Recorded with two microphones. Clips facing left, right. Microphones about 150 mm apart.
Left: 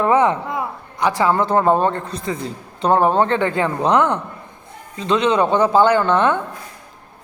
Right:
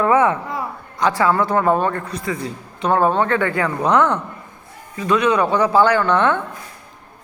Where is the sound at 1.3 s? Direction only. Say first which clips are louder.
Left 1 dB; 25° left (ahead or behind).